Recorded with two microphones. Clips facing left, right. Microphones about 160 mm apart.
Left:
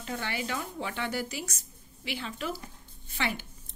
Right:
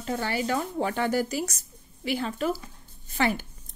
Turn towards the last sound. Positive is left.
turn(degrees=-45)  # may be behind; listen again after turning